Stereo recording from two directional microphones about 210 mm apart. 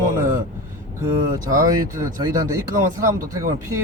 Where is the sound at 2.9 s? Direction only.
15° right (ahead or behind).